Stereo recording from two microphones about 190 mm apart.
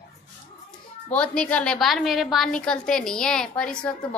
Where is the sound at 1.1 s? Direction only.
5° left (ahead or behind).